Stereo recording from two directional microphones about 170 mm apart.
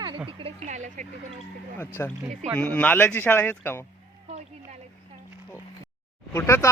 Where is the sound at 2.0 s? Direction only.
10° left (ahead or behind).